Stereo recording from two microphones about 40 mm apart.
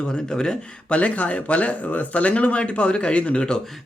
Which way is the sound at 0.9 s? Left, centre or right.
Left.